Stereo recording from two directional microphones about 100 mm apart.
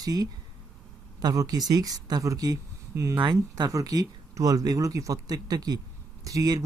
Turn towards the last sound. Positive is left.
turn(degrees=-35)  # may be behind; listen again after turning